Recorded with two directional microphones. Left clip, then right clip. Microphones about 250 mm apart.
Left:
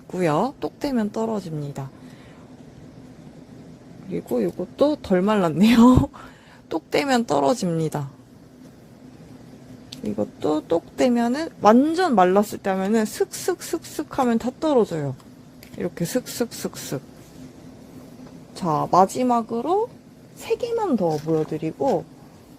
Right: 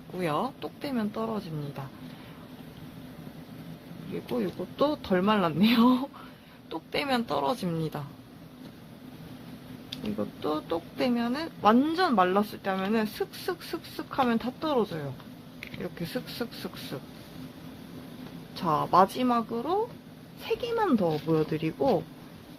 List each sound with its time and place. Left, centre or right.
0.1 s speech: left
4.4 s a woman's voice: left
10.2 s a woman's voice: left
18.6 s speech: left
20.8 s speech: centre